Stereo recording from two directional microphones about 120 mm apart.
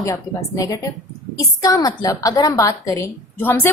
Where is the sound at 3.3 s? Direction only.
20° left (ahead or behind).